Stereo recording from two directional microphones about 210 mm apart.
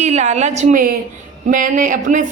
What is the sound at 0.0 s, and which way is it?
A woman's voice, 35° right (ahead or behind).